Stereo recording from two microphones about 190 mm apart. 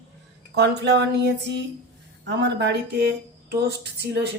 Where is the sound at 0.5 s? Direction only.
60° right (ahead or behind).